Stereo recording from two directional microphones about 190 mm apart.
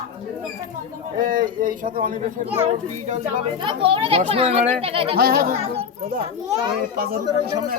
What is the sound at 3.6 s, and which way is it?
Speech, 25° right (ahead or behind).